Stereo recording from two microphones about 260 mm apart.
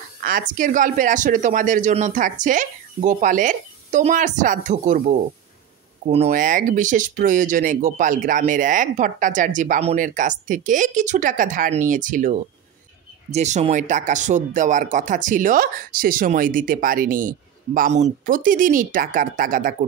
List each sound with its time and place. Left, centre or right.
0.2 s speech: right